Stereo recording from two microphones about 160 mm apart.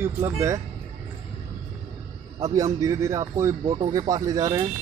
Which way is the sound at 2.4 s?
20° right (ahead or behind).